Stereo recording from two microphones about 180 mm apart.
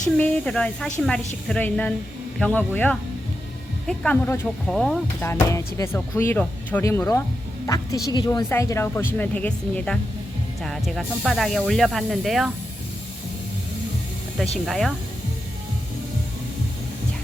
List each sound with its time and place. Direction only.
0.2 s speech: 5° left (ahead or behind)
5.2 s speech: 15° left (ahead or behind)
14.7 s speech: centre (ahead or behind)